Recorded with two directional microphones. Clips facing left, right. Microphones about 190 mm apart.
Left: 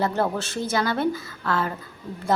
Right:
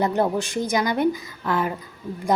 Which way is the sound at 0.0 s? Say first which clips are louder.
Right 3 dB; 15° right (ahead or behind).